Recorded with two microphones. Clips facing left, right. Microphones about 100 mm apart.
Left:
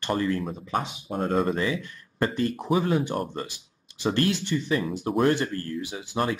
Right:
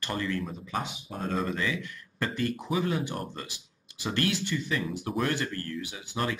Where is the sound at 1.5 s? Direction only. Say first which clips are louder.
Left 5 dB; 30° left (ahead or behind).